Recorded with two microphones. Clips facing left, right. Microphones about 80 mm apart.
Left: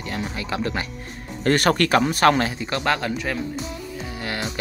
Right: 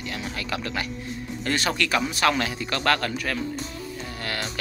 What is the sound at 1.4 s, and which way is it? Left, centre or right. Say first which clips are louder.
Speech: left 7 dB; left.